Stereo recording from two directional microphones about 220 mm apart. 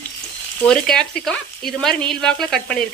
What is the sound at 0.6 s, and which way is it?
Stir, 5° left (ahead or behind).